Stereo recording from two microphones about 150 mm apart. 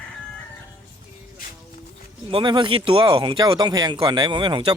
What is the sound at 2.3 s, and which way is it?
Speech, 35° right (ahead or behind).